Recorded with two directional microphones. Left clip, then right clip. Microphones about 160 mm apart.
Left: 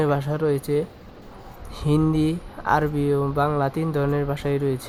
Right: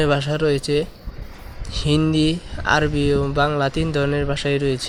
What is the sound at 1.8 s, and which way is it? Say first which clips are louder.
Speech: right 3 dB; 10° right (ahead or behind).